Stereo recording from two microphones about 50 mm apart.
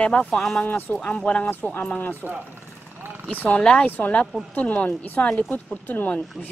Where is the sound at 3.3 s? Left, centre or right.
Left.